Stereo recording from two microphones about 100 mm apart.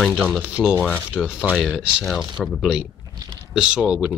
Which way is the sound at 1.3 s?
10° right (ahead or behind).